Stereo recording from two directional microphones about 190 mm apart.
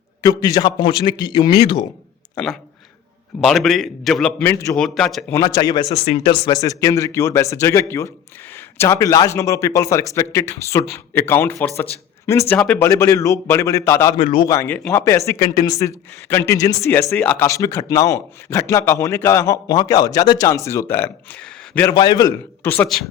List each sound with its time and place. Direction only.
0.2 s a man's voice: 20° left (ahead or behind)
2.3 s a man's voice: 5° left (ahead or behind)
5.3 s a man's voice: 20° left (ahead or behind)
6.1 s speech: 35° left (ahead or behind)
6.4 s a man's voice: 20° left (ahead or behind)
14.2 s a man's voice: 25° left (ahead or behind); by 21.9 s 10° left (ahead or behind)
21.9 s a man's voice: 20° left (ahead or behind); by 23.0 s 5° left (ahead or behind)